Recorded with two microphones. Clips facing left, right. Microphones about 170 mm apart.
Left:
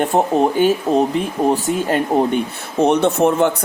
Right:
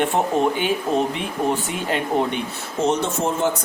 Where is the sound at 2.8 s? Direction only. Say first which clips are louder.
Left 7 dB; 60° left (ahead or behind).